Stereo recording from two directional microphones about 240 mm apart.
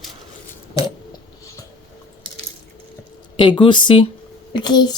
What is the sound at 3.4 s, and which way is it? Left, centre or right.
Speech, centre.